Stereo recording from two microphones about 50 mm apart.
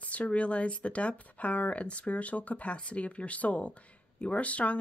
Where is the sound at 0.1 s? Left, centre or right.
Left.